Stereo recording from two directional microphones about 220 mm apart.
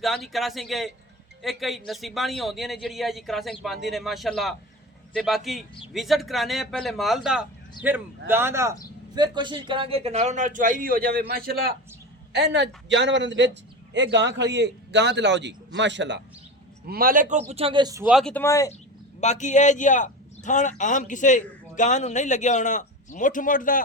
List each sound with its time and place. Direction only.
0.0 s a man's voice: centre (ahead or behind); by 16.2 s 55° right (ahead or behind)
16.8 s a man's voice: 40° right (ahead or behind)
17.5 s speech: 25° right (ahead or behind)
18.0 s a man's voice: centre (ahead or behind)
19.2 s speech: 30° left (ahead or behind)